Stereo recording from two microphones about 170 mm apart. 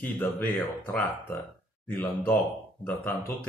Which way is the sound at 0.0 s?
10° left (ahead or behind).